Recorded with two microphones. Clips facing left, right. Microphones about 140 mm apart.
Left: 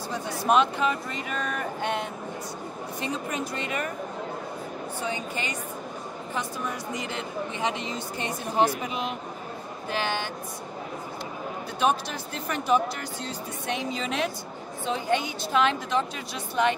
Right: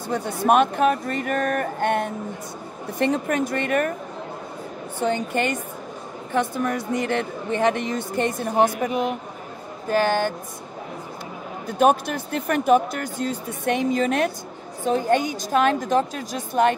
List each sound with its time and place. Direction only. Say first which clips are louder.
0.1 s speech: right 4 dB; 55° right (ahead or behind)
5.0 s speech: right 11 dB; 60° right (ahead or behind)
11.6 s speech: right 7 dB; 50° right (ahead or behind)